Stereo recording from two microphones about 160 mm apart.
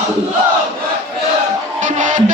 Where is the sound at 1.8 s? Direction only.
55° right (ahead or behind).